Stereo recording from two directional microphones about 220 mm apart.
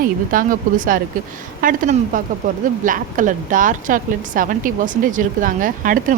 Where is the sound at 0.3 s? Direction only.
40° right (ahead or behind).